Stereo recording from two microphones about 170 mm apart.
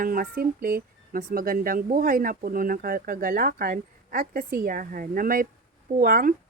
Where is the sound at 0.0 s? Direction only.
60° right (ahead or behind).